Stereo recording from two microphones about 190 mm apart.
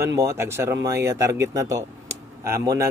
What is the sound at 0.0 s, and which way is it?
A man's voice, 15° right (ahead or behind).